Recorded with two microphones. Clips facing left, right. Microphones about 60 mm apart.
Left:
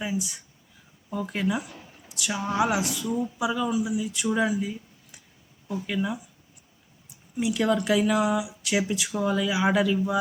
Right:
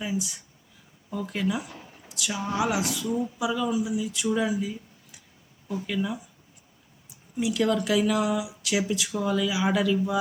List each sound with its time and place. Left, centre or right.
0.0 s speech: centre
3.6 s speech: centre
5.8 s speech: centre
7.3 s speech: centre